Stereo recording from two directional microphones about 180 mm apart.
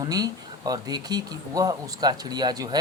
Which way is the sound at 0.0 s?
20° right (ahead or behind).